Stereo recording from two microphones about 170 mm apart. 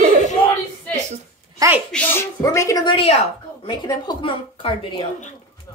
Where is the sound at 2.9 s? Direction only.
35° left (ahead or behind).